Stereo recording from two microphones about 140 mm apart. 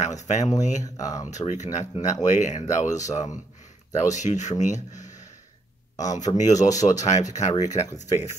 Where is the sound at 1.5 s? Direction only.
55° left (ahead or behind).